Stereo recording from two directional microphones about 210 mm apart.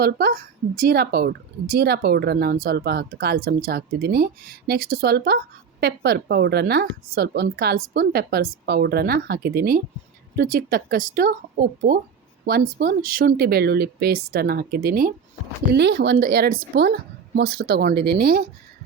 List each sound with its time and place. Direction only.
0.0 s speech: 45° right (ahead or behind)
15.7 s speech: 55° right (ahead or behind)